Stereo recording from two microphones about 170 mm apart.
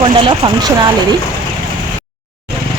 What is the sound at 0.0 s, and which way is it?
Speech, 30° right (ahead or behind).